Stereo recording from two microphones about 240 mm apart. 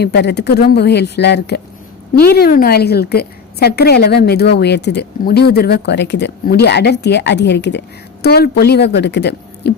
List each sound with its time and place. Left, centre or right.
0.0 s a woman's voice: left